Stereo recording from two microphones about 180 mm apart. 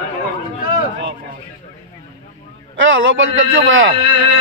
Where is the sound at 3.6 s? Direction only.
90° right.